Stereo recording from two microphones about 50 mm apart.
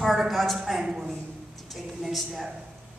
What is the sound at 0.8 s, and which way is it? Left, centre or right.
Speech, centre.